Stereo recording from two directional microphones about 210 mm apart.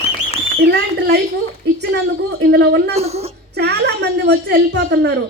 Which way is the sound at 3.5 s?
50° right (ahead or behind).